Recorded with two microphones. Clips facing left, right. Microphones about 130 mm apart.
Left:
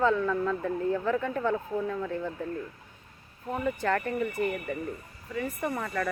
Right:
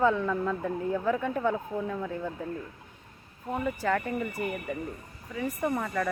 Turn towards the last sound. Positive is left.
turn(degrees=-5)  # may be behind; listen again after turning